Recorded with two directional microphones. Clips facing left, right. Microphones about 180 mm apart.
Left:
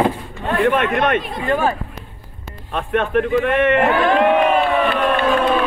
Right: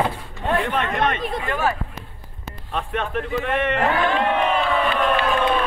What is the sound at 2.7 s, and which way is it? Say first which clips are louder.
A man's voice: left 7 dB; 60° left (ahead or behind).